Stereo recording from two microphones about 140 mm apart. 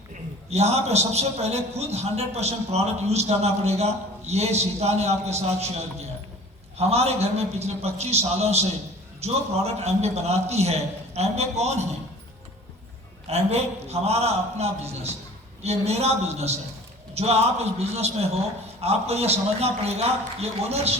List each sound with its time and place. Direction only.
0.1 s a man's voice: 50° right (ahead or behind)
13.3 s a man's voice: 50° right (ahead or behind)